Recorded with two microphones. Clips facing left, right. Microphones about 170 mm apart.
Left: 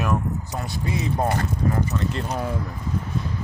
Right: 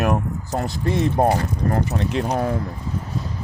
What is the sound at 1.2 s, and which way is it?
Speech, 50° right (ahead or behind).